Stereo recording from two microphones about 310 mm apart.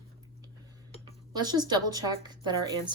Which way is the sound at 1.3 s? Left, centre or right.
Centre.